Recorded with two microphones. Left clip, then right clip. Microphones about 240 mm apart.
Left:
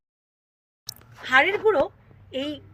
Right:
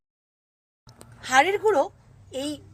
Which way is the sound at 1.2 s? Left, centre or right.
Centre.